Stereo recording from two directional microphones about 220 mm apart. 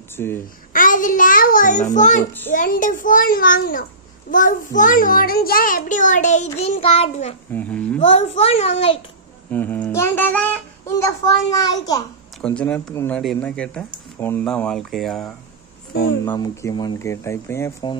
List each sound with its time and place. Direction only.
0.1 s a child's voice: 10° left (ahead or behind)
0.7 s a child's voice: 35° left (ahead or behind)
7.5 s speech: 5° left (ahead or behind)
8.0 s a child's voice: 30° left (ahead or behind)
9.5 s a sound: 10° left (ahead or behind)
11.0 s speech: 15° left (ahead or behind)
12.4 s speech: 5° left (ahead or behind)
16.3 s speech: 15° left (ahead or behind)